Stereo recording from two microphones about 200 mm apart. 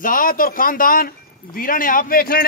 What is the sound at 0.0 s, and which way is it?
Speech, 45° left (ahead or behind).